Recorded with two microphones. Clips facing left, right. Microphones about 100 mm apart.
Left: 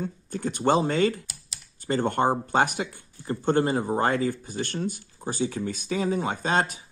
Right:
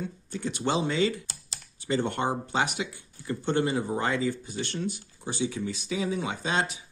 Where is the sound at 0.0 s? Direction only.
45° left (ahead or behind).